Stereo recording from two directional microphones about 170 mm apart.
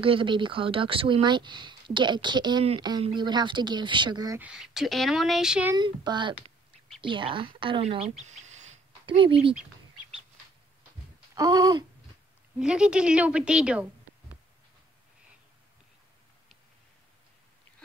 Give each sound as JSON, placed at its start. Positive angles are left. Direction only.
{"t": 0.0, "sound": "speech", "side_deg": -30}
{"t": 4.4, "sound": "speech", "side_deg": -5}
{"t": 5.8, "sound": "speech", "side_deg": -25}
{"t": 8.2, "sound": "bird", "side_deg": -45}
{"t": 9.0, "sound": "speech", "side_deg": -30}
{"t": 11.3, "sound": "speech", "side_deg": -20}
{"t": 12.5, "sound": "speech", "side_deg": -5}